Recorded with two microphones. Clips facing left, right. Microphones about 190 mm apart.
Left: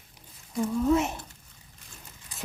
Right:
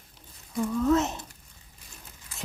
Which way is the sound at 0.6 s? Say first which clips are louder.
Even; 15° left (ahead or behind).